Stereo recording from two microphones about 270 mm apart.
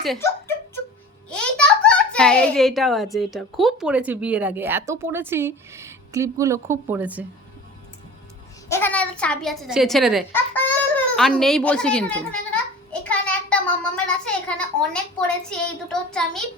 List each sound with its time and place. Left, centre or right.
0.0 s a child's voice: centre
8.7 s a child's voice: centre
12.9 s a sound: centre
15.4 s a child's voice: centre